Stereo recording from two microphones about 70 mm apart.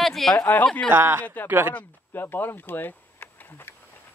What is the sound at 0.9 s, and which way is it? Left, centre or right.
Speech, right.